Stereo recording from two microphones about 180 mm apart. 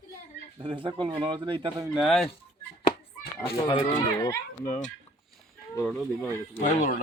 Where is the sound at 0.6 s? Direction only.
30° right (ahead or behind).